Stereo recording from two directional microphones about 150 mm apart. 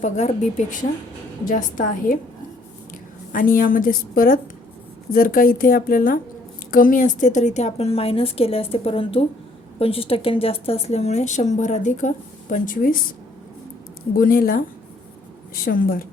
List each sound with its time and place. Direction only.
0.0 s a woman's voice: 50° left (ahead or behind)
3.3 s a woman's voice: 70° left (ahead or behind)
14.2 s a woman's voice: 75° left (ahead or behind)
15.6 s a woman's voice: 75° left (ahead or behind)